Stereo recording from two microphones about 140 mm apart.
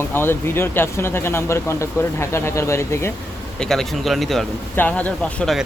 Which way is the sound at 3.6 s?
5° left (ahead or behind).